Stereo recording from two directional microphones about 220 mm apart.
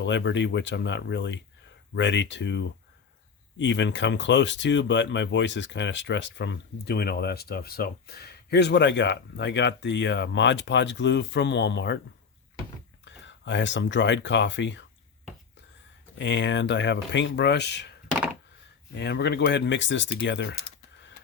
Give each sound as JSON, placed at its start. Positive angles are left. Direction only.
{"t": 0.0, "sound": "speech", "side_deg": 55}
{"t": 13.1, "sound": "speech", "side_deg": 55}
{"t": 16.1, "sound": "speech", "side_deg": 55}
{"t": 18.9, "sound": "speech", "side_deg": 50}
{"t": 20.2, "sound": "typing", "side_deg": 55}